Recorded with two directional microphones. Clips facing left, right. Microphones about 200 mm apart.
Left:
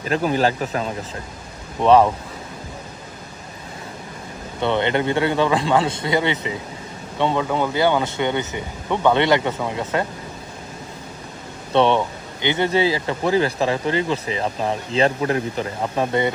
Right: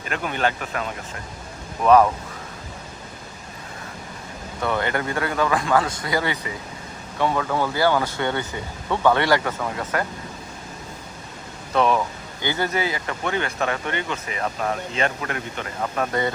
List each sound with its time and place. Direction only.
0.0 s speech: 35° left (ahead or behind)
4.6 s speech: 25° left (ahead or behind)
11.7 s speech: 30° left (ahead or behind)